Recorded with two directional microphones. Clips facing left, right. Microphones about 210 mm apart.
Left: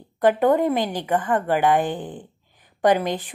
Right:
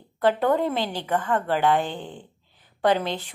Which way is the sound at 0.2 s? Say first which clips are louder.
Left 4 dB; 15° left (ahead or behind).